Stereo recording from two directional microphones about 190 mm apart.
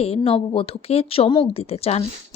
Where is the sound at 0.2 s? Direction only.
25° left (ahead or behind).